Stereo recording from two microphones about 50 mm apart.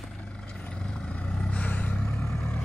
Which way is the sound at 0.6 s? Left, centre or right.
Left.